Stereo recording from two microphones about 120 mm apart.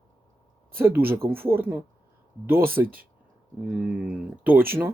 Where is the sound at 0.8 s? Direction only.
20° right (ahead or behind).